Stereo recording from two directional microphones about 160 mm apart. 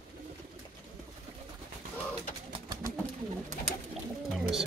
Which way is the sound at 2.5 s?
25° right (ahead or behind).